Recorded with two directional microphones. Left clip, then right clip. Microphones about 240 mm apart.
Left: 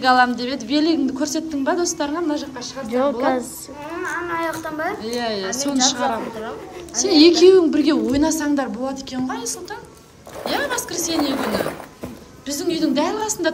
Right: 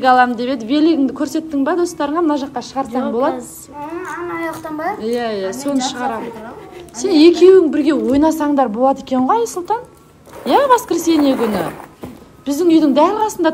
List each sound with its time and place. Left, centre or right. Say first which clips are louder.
0.0 s a woman's voice: right 4 dB; centre
4.0 s a woman's voice: left 2 dB; centre
4.4 s speech: right 1 dB; centre
5.0 s a woman's voice: right 5 dB; centre